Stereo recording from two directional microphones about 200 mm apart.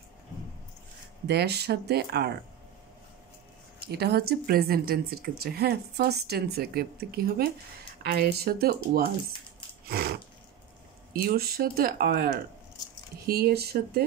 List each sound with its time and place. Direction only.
1.2 s speech: 55° right (ahead or behind)
3.9 s speech: 55° right (ahead or behind)
9.8 s a sound: 50° right (ahead or behind)
11.2 s speech: 50° right (ahead or behind)
13.3 s speech: 50° right (ahead or behind)